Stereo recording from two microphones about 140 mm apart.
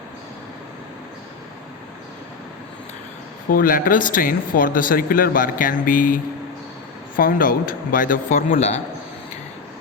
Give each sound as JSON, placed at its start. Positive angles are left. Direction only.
{"t": 3.5, "sound": "speech", "side_deg": 90}
{"t": 7.2, "sound": "a man's voice", "side_deg": 85}